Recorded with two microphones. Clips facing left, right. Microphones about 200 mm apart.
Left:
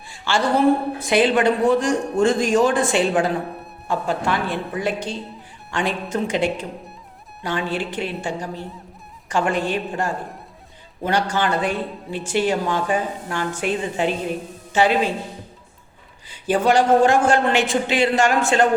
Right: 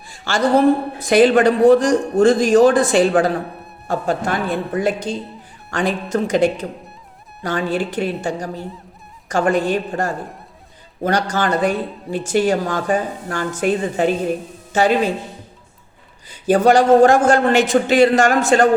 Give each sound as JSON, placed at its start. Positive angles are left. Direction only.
{"t": 0.1, "sound": "a woman's voice", "side_deg": -40}
{"t": 16.3, "sound": "a woman's voice", "side_deg": -45}